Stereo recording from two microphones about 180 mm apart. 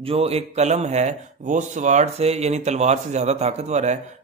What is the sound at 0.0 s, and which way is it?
Speech, 35° right (ahead or behind).